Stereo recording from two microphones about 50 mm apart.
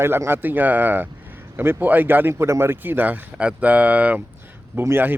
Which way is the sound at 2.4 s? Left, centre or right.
Right.